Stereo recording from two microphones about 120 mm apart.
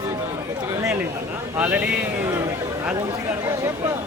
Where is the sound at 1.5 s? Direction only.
10° right (ahead or behind).